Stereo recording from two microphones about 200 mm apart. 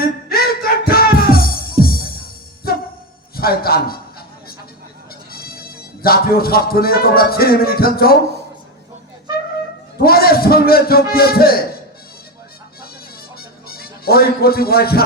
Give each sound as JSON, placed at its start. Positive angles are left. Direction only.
{"t": 0.0, "sound": "music", "side_deg": 50}
{"t": 3.3, "sound": "a man's voice", "side_deg": 50}
{"t": 5.3, "sound": "music", "side_deg": 50}
{"t": 10.0, "sound": "a man's voice", "side_deg": 50}
{"t": 13.4, "sound": "music", "side_deg": 50}